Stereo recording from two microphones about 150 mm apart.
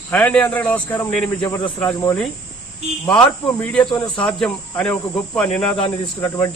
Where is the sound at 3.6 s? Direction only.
5° left (ahead or behind).